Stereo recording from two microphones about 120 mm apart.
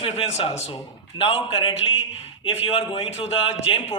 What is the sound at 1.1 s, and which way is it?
A man's voice, 50° left (ahead or behind).